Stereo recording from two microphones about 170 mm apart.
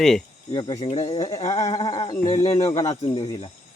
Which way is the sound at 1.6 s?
25° left (ahead or behind).